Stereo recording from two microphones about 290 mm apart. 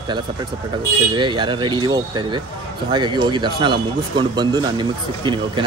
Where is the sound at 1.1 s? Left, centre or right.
Centre.